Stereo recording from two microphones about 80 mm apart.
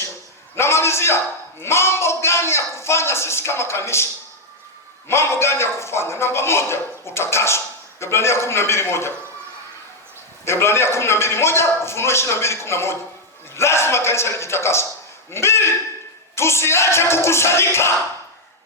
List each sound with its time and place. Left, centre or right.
0.5 s a sound: left
5.0 s a man's voice: left
10.4 s a man's voice: left